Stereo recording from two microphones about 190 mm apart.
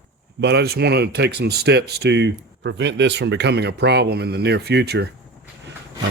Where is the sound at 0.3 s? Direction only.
55° right (ahead or behind).